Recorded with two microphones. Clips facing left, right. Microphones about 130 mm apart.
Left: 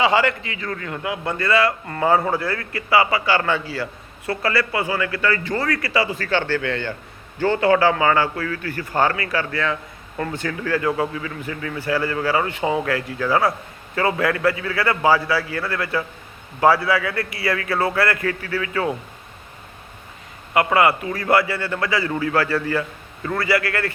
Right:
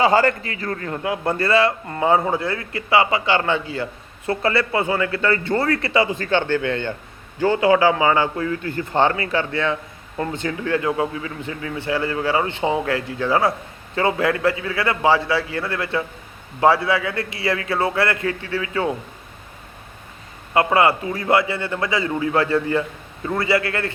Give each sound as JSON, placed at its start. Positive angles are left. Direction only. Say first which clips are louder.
{"t": 0.0, "sound": "a man's voice", "louder": "right 2 dB", "side_deg": -40}
{"t": 20.5, "sound": "a man's voice", "louder": "right 1 dB", "side_deg": -25}